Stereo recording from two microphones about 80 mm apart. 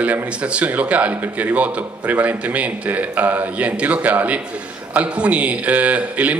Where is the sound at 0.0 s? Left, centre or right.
Centre.